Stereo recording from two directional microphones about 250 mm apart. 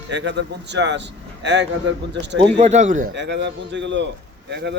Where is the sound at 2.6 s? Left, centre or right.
Right.